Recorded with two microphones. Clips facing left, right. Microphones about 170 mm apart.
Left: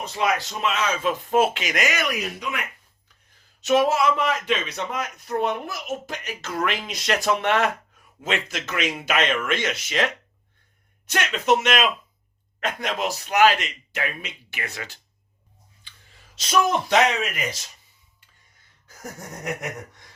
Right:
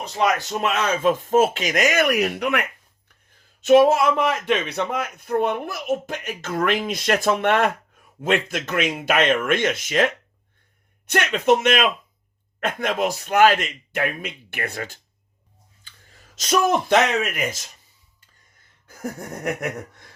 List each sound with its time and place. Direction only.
0.2 s speech: 50° right (ahead or behind); by 2.6 s 65° right (ahead or behind)
3.6 s speech: 50° right (ahead or behind)
15.8 s clicking: 45° right (ahead or behind)
18.9 s a sound: 55° right (ahead or behind)